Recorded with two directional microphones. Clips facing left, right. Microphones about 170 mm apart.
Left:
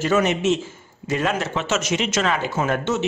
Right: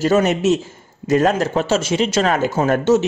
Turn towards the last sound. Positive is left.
turn(degrees=-40)  # may be behind; listen again after turning